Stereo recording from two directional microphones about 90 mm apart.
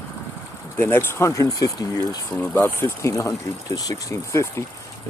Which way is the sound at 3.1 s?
40° left (ahead or behind).